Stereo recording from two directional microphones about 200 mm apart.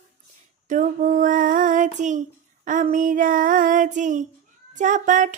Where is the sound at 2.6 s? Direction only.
40° right (ahead or behind).